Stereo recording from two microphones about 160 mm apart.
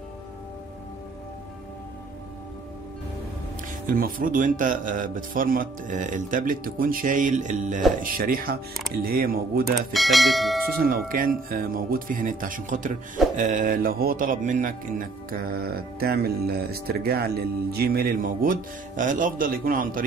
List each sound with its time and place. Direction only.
3.9 s speech: 60° right (ahead or behind)
8.0 s speech: 60° right (ahead or behind)
9.9 s speech: centre (ahead or behind)
11.1 s speech: 60° right (ahead or behind)